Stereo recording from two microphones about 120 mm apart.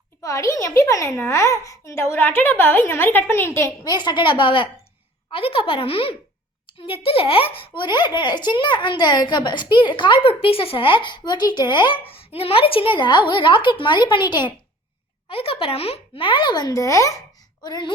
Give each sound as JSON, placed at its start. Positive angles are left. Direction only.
{"t": 0.2, "sound": "a woman's voice", "side_deg": 25}
{"t": 3.8, "sound": "a woman's voice", "side_deg": 35}
{"t": 12.0, "sound": "a woman's voice", "side_deg": 50}
{"t": 15.3, "sound": "a woman's voice", "side_deg": 50}